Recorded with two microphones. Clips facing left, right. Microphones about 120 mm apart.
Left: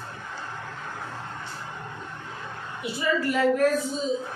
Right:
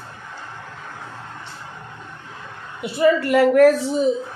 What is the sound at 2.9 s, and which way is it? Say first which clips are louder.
A woman's voice: right 9 dB; 70° right (ahead or behind).